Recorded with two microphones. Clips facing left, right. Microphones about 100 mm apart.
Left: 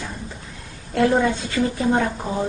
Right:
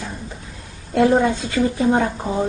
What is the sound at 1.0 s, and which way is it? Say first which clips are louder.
A woman's voice: right 3 dB; 20° right (ahead or behind).